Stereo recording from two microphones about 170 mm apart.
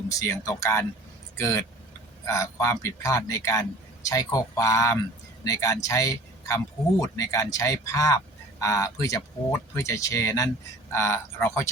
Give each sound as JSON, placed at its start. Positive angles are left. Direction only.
{"t": 0.1, "sound": "speech", "side_deg": 20}